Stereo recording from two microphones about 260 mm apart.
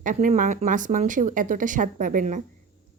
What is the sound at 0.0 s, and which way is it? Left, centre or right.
A woman's voice, right.